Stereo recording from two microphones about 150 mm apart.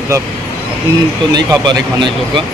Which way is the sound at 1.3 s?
30° right (ahead or behind).